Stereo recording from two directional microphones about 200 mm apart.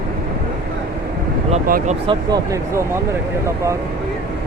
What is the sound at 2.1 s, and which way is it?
Speech, 15° right (ahead or behind).